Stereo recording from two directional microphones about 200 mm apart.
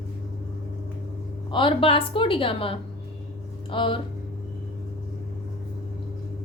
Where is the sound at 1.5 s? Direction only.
25° left (ahead or behind).